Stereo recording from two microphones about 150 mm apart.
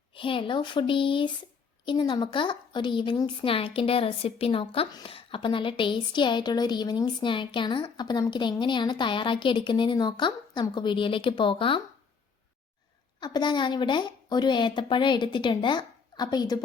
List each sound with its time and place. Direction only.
0.1 s a woman's voice: 35° left (ahead or behind)
13.1 s a woman's voice: 30° left (ahead or behind)